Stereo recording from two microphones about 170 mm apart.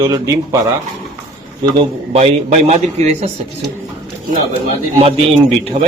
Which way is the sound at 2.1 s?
40° right (ahead or behind).